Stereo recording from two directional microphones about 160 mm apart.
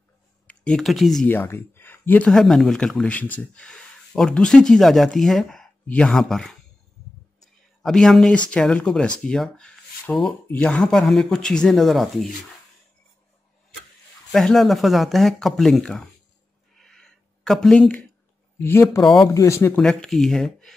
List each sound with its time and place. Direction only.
0.5 s speech: 5° left (ahead or behind)
1.3 s speech: 10° left (ahead or behind)
7.8 s speech: centre (ahead or behind)
14.3 s speech: centre (ahead or behind)
16.7 s a sound: 5° left (ahead or behind)
18.6 s speech: 15° left (ahead or behind)
19.8 s speech: 5° left (ahead or behind)